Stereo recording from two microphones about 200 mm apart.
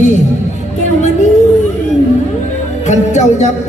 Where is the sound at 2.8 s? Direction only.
35° left (ahead or behind).